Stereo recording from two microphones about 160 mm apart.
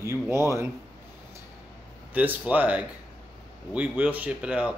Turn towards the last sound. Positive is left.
turn(degrees=-5)  # may be behind; listen again after turning